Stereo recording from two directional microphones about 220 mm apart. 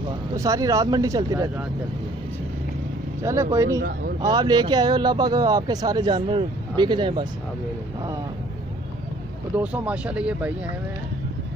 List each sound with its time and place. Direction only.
0.3 s speech: 15° right (ahead or behind)
3.2 s a man's voice: 15° right (ahead or behind)
9.6 s speech: 5° right (ahead or behind)